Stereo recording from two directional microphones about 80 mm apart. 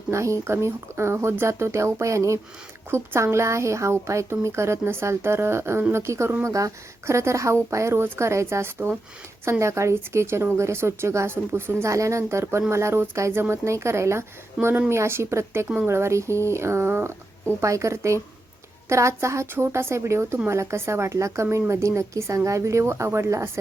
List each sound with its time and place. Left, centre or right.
0.1 s a woman's voice: right